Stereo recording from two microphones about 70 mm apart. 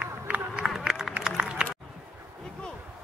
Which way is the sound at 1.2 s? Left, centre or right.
Centre.